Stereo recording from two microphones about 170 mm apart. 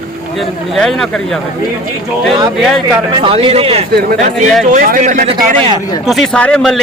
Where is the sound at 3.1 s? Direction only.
30° right (ahead or behind).